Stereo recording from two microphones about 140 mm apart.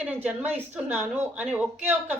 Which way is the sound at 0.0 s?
10° right (ahead or behind).